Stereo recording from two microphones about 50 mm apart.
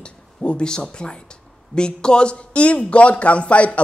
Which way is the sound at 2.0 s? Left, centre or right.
Centre.